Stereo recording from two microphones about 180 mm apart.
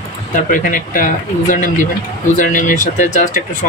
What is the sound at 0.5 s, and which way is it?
Speech, 50° left (ahead or behind).